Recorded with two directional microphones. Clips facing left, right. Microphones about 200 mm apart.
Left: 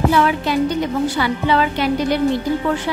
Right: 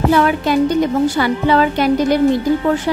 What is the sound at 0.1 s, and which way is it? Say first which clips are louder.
A woman's voice: right 3 dB; 50° right (ahead or behind).